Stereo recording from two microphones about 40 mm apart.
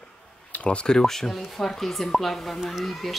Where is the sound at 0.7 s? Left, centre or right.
Centre.